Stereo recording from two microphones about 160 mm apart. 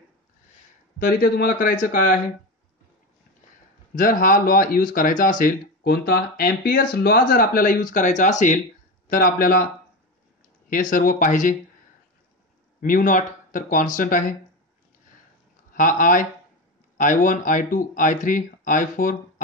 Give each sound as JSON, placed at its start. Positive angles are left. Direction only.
{"t": 0.9, "sound": "speech", "side_deg": 65}
{"t": 3.9, "sound": "speech", "side_deg": 60}
{"t": 9.1, "sound": "speech", "side_deg": 65}
{"t": 10.7, "sound": "speech", "side_deg": 60}
{"t": 12.8, "sound": "speech", "side_deg": 60}
{"t": 15.7, "sound": "speech", "side_deg": 55}